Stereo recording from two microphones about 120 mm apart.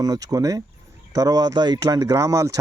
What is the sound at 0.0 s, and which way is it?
Speech, 30° right (ahead or behind).